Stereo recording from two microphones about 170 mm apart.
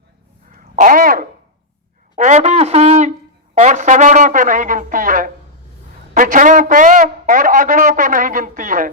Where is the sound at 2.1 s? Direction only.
45° right (ahead or behind).